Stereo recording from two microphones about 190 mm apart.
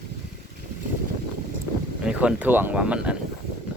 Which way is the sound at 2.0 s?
5° right (ahead or behind).